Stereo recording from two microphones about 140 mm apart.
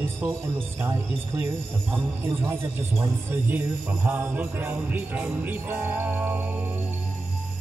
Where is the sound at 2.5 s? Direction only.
15° right (ahead or behind).